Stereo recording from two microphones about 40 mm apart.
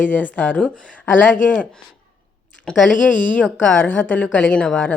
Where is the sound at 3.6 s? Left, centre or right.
Left.